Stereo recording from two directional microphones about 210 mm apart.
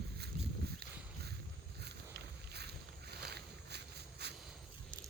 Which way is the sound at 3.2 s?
50° right (ahead or behind).